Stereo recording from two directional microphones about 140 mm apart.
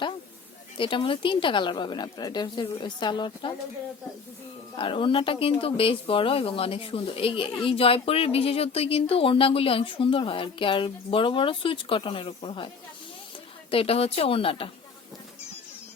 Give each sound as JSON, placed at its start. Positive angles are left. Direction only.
{"t": 0.8, "sound": "speech", "side_deg": 35}
{"t": 4.8, "sound": "speech", "side_deg": 40}